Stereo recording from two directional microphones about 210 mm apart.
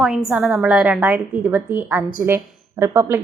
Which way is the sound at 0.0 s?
Centre (ahead or behind).